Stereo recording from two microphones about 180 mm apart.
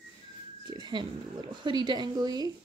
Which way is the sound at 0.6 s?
25° right (ahead or behind).